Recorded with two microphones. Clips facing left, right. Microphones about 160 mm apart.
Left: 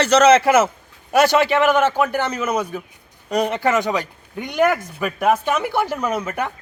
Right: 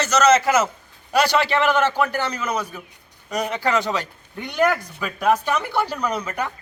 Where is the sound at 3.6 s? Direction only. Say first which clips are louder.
Left 3 dB; 20° left (ahead or behind).